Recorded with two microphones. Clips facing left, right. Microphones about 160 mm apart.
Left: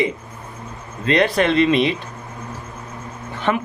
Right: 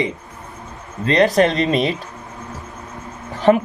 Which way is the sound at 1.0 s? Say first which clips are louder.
Right 2 dB; 35° right (ahead or behind).